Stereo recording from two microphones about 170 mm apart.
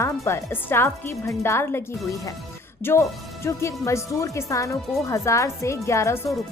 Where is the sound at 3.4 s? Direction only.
15° left (ahead or behind).